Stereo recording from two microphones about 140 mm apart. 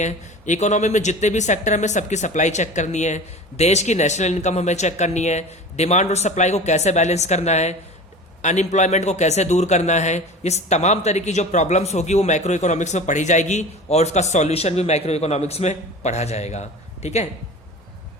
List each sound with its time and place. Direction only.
0.0 s a man's voice: 60° left (ahead or behind)